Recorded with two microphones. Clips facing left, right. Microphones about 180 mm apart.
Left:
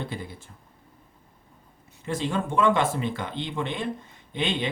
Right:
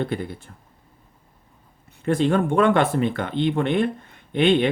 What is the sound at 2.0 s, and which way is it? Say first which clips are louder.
Speech: right 8 dB; 60° right (ahead or behind).